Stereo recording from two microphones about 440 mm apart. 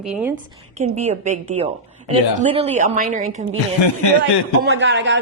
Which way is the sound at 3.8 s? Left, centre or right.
Left.